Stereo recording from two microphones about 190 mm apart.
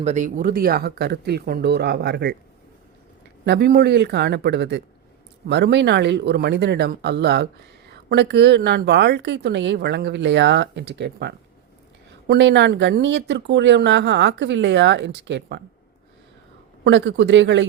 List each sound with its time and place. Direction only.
0.0 s a woman's voice: 40° right (ahead or behind); by 2.3 s 60° right (ahead or behind)
3.4 s a woman's voice: 60° right (ahead or behind)
16.8 s speech: 70° right (ahead or behind)